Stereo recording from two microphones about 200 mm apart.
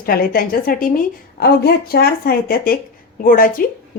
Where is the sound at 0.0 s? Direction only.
45° left (ahead or behind).